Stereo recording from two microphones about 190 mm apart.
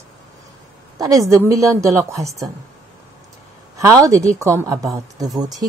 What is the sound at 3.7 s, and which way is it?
Speech, 15° right (ahead or behind).